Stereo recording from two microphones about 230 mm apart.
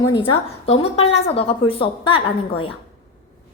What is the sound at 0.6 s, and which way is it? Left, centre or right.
A woman's voice, left.